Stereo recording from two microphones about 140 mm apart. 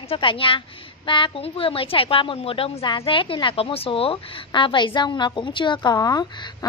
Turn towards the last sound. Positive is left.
turn(degrees=30)  # may be behind; listen again after turning